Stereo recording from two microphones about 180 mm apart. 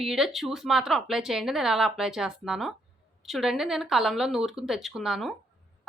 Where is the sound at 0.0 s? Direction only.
Centre (ahead or behind).